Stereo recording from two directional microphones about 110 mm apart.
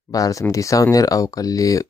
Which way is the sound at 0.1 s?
30° left (ahead or behind).